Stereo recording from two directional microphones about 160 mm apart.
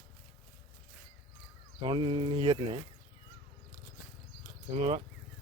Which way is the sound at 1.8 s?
30° right (ahead or behind).